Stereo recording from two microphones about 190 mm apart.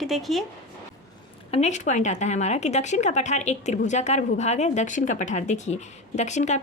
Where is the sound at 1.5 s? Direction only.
35° left (ahead or behind).